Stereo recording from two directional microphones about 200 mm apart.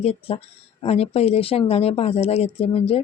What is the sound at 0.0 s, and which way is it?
Speech, 30° left (ahead or behind).